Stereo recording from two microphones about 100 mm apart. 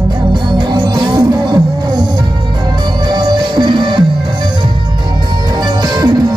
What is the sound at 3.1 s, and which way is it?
Music, 45° right (ahead or behind).